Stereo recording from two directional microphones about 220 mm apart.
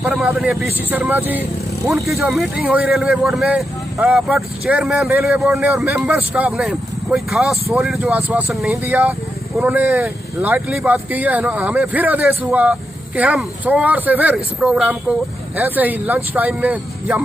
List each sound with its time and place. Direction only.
0.0 s speech: 5° right (ahead or behind)